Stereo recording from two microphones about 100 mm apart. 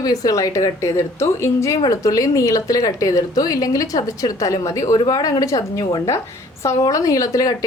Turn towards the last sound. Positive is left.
turn(degrees=35)  # may be behind; listen again after turning